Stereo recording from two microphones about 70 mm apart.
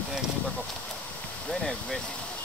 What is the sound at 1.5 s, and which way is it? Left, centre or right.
Speech, centre.